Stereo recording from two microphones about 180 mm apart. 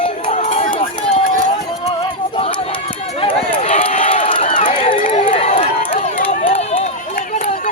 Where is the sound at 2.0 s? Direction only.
25° left (ahead or behind).